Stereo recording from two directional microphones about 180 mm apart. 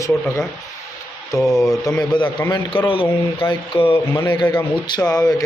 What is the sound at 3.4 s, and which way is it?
A man's voice, 25° left (ahead or behind).